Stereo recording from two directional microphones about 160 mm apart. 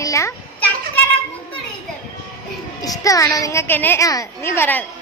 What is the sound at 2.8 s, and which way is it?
A woman's voice, 20° left (ahead or behind).